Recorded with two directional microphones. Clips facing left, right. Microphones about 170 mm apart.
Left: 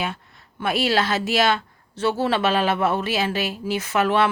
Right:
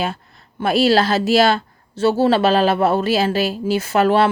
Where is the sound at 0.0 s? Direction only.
35° right (ahead or behind).